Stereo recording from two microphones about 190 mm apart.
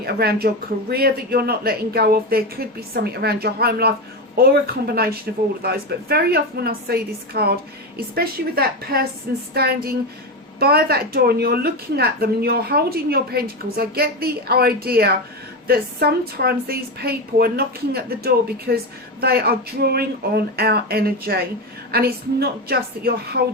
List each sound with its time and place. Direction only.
0.0 s a woman's voice: 55° right (ahead or behind)